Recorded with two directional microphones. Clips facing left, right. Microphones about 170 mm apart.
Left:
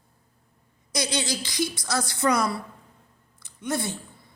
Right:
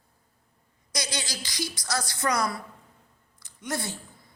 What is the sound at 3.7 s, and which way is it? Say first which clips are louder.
Speech: left 4 dB; 20° left (ahead or behind).